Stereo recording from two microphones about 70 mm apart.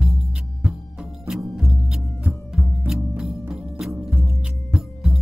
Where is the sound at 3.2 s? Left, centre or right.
Centre.